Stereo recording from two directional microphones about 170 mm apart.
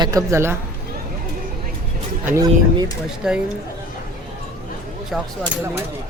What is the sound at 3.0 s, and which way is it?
Speech, 5° right (ahead or behind).